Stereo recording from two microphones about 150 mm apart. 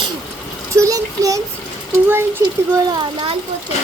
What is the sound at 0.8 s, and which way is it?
Child singing, 25° right (ahead or behind).